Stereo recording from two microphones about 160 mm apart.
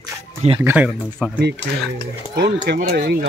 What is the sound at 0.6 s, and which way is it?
Speech, 15° right (ahead or behind).